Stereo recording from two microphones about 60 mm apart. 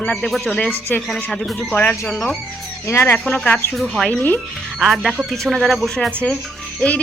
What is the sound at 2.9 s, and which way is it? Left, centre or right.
Speech, left.